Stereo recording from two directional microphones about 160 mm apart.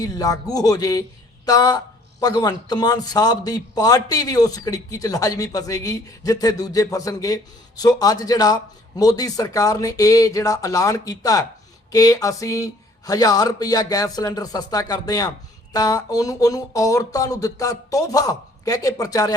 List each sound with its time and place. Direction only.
0.0 s a man's voice: 25° left (ahead or behind)